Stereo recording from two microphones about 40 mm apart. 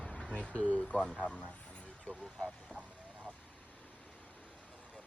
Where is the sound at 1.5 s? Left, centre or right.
Left.